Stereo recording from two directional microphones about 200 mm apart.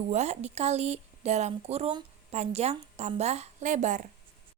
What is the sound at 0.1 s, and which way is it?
A woman's voice, 35° right (ahead or behind).